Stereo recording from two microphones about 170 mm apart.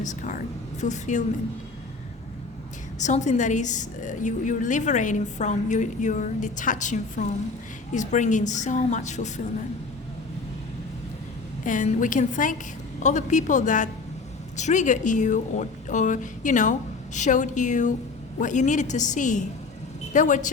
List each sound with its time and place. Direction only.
0.0 s a woman's voice: 45° left (ahead or behind)
3.0 s a woman's voice: 45° left (ahead or behind)
11.6 s a woman's voice: 50° left (ahead or behind)